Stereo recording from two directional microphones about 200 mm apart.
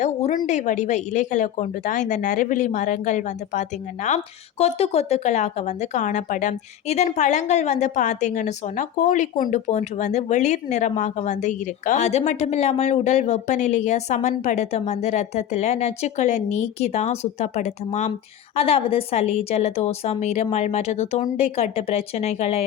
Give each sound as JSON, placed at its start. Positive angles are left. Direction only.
{"t": 0.0, "sound": "speech", "side_deg": 35}